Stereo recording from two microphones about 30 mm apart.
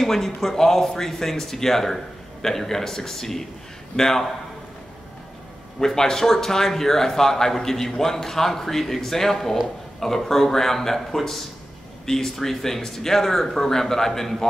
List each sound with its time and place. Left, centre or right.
0.0 s speech: centre
5.8 s speech: centre